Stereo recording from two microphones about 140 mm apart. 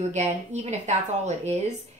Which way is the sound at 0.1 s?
55° right (ahead or behind).